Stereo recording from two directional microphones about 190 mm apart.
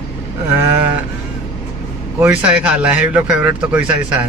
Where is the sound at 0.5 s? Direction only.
10° right (ahead or behind).